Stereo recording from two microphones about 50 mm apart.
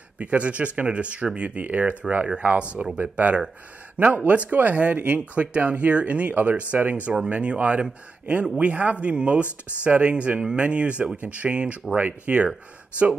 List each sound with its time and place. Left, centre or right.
0.2 s speech: right